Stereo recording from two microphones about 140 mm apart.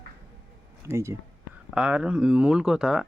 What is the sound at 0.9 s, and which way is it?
Speech, 20° right (ahead or behind).